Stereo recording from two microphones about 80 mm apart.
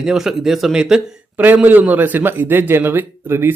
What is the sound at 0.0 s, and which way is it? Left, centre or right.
Speech, centre.